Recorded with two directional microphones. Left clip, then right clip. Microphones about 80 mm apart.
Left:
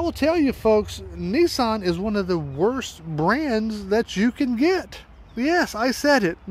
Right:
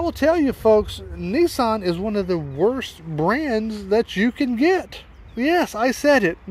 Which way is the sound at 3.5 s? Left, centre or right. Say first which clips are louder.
Right 1 dB; left.